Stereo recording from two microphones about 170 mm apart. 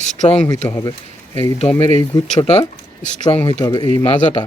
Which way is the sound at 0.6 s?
15° left (ahead or behind).